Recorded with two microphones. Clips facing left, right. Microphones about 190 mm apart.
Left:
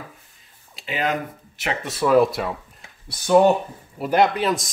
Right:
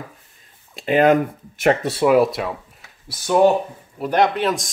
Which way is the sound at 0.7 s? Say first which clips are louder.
Right 10 dB; 50° right (ahead or behind).